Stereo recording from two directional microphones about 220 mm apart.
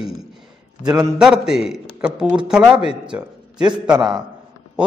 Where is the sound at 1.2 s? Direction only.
Centre (ahead or behind).